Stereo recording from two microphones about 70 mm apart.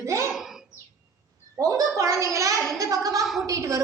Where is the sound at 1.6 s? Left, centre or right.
Right.